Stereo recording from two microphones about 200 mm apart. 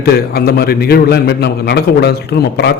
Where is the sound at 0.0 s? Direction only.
50° left (ahead or behind).